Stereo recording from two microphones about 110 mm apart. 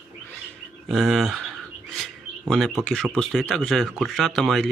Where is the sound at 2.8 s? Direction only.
5° left (ahead or behind).